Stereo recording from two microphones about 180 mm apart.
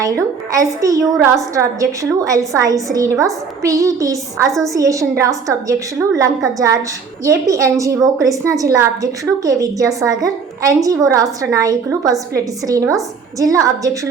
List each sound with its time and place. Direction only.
0.0 s a woman's voice: 15° right (ahead or behind)